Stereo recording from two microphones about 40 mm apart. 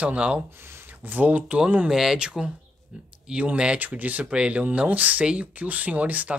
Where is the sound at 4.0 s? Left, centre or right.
Right.